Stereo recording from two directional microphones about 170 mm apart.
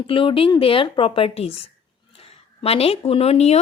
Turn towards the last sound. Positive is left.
turn(degrees=40)  # may be behind; listen again after turning